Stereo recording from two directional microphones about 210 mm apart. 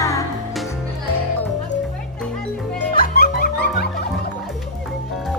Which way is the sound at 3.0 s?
45° left (ahead or behind).